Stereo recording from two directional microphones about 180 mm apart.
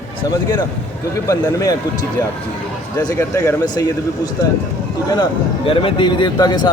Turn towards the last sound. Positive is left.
turn(degrees=20)  # may be behind; listen again after turning